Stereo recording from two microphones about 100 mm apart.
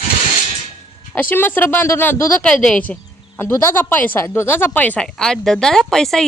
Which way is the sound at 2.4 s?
10° left (ahead or behind).